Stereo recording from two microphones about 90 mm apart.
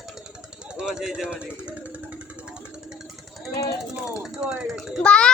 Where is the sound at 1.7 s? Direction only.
15° right (ahead or behind).